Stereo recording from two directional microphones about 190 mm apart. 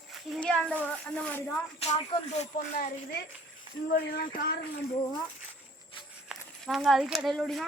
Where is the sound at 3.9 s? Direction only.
55° left (ahead or behind).